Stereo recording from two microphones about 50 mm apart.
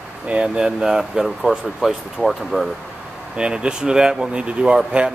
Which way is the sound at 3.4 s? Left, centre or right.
Centre.